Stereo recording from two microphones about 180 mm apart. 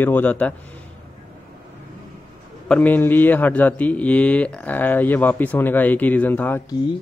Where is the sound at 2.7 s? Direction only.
10° left (ahead or behind).